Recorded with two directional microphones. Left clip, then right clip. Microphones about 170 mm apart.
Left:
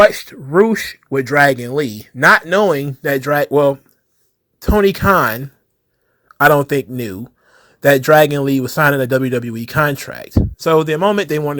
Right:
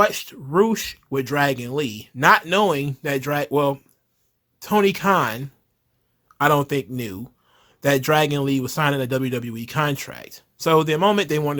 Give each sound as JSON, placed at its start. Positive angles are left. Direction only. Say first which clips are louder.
{"t": 0.0, "sound": "speech", "louder": "left 9 dB", "side_deg": 20}